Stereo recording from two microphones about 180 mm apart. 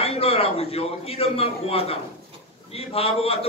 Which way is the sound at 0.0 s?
35° left (ahead or behind).